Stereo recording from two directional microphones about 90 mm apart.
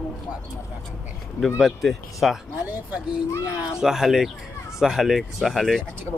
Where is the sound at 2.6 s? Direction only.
20° right (ahead or behind).